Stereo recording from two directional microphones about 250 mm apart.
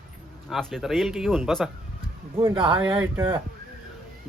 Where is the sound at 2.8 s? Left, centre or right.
Centre.